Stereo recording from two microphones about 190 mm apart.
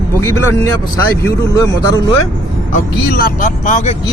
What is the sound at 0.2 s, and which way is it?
Speech, 15° left (ahead or behind).